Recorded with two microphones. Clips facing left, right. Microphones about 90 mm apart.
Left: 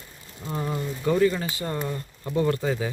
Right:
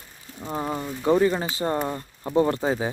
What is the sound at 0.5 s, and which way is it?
Speech, 30° right (ahead or behind).